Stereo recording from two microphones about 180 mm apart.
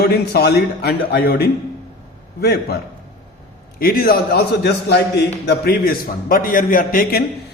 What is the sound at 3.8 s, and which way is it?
A man's voice, 55° left (ahead or behind).